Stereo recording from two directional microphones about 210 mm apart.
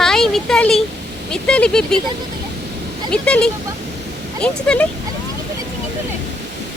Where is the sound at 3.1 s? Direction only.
5° left (ahead or behind).